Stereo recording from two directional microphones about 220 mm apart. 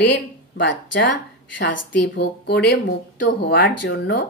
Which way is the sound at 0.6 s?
55° left (ahead or behind).